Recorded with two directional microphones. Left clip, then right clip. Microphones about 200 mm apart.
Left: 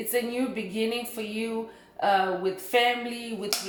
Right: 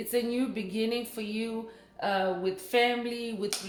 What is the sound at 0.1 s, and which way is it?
Speech, 30° right (ahead or behind).